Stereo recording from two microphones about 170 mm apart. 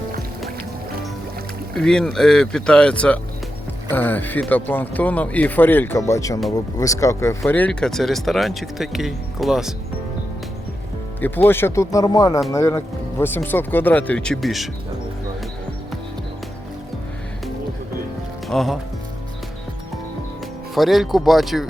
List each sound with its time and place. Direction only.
1.7 s speech: 5° left (ahead or behind)
11.2 s speech: 10° left (ahead or behind)
18.4 s speech: centre (ahead or behind)
20.7 s speech: centre (ahead or behind)